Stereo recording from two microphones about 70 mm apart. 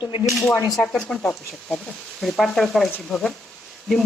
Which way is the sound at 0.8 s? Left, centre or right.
Centre.